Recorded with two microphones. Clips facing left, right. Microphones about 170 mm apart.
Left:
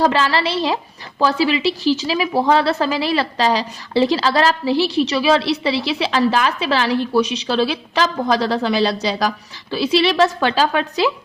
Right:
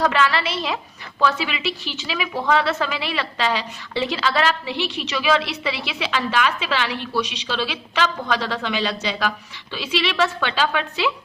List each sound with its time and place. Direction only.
0.0 s a woman's voice: 30° left (ahead or behind)